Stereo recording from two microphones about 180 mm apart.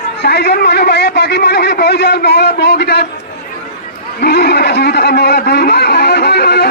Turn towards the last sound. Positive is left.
turn(degrees=60)  # may be behind; listen again after turning